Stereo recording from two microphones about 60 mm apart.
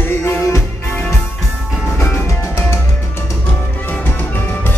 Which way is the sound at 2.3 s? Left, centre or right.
Left.